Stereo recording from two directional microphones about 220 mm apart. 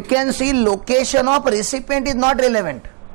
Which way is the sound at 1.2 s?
25° right (ahead or behind).